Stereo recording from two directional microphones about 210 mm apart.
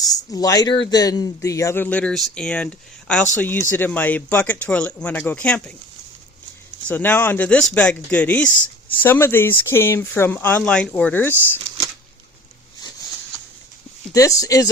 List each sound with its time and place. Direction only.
0.0 s a sound: 15° left (ahead or behind)
0.9 s speech: 20° left (ahead or behind)
6.8 s speech: 10° left (ahead or behind)
14.1 s speech: 15° left (ahead or behind)